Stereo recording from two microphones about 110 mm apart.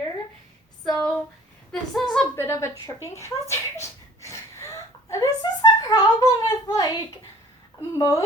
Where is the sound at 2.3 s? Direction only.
25° left (ahead or behind).